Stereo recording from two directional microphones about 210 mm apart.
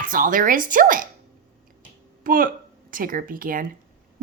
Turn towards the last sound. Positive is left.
turn(degrees=-40)  # may be behind; listen again after turning